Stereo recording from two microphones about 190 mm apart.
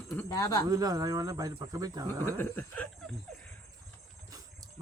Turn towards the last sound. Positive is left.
turn(degrees=5)  # may be behind; listen again after turning